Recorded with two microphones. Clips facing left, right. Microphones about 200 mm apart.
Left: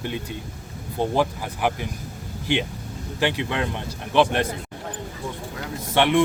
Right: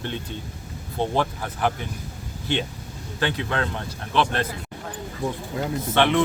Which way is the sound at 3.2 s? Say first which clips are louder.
Left 1 dB; 15° left (ahead or behind).